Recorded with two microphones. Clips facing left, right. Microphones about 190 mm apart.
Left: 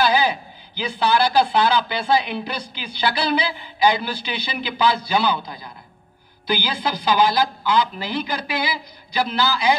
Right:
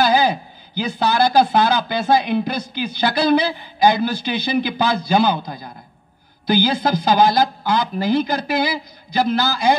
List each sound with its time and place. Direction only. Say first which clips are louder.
0.0 s speech: right 3 dB; 45° right (ahead or behind)